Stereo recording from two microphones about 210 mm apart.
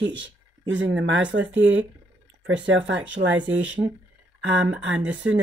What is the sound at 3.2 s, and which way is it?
Speech, 40° right (ahead or behind).